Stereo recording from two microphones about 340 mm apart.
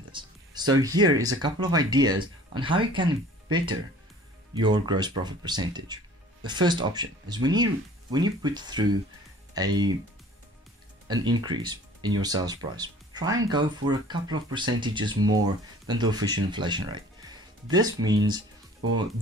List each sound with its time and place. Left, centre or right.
0.1 s speech: centre
11.1 s speech: centre